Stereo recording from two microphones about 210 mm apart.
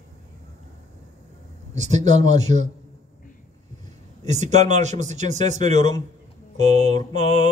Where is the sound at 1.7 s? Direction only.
35° right (ahead or behind).